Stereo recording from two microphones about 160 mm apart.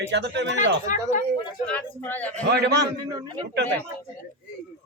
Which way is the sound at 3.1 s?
25° right (ahead or behind).